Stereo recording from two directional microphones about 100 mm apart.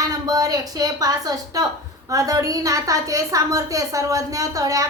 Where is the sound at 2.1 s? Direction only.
35° right (ahead or behind).